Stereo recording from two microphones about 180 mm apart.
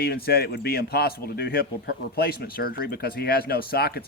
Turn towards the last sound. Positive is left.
turn(degrees=60)  # may be behind; listen again after turning